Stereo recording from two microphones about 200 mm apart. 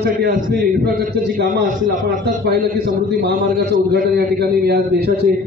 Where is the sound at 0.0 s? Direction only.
50° right (ahead or behind).